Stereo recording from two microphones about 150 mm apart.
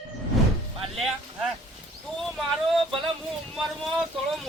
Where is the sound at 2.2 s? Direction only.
5° left (ahead or behind).